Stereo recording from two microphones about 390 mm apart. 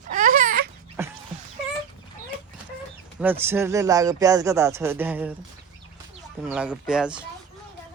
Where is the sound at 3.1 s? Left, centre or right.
Centre.